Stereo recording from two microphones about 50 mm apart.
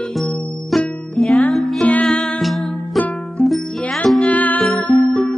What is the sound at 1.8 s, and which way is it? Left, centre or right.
Music, left.